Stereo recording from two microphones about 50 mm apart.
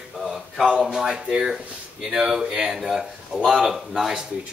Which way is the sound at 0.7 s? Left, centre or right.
Centre.